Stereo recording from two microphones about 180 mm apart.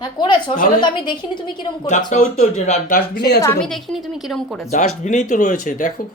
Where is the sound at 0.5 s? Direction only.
50° left (ahead or behind).